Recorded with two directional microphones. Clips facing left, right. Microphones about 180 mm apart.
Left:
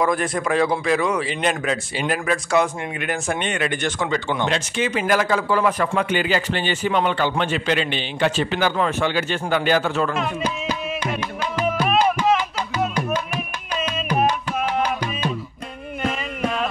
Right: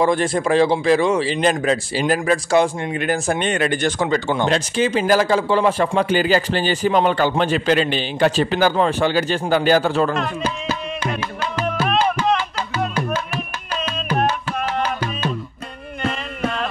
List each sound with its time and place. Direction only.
0.0 s speech: 30° right (ahead or behind)
10.4 s music: 10° left (ahead or behind)
14.8 s music: 15° left (ahead or behind)
16.3 s carnatic music: 5° left (ahead or behind)